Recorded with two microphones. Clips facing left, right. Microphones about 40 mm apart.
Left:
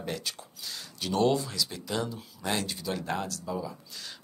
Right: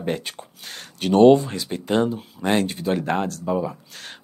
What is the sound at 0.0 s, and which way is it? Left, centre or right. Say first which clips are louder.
Speech: right 8 dB; right.